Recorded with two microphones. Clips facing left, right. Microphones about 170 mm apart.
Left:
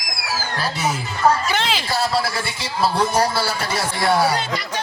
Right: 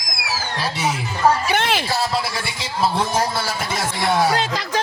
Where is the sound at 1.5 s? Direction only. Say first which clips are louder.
Right 2 dB; 55° right (ahead or behind).